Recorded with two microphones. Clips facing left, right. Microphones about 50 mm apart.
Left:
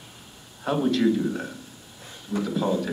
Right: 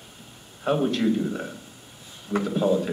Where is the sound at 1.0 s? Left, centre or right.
Centre.